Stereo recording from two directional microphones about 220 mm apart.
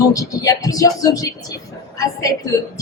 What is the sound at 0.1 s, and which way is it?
Speech, 15° left (ahead or behind).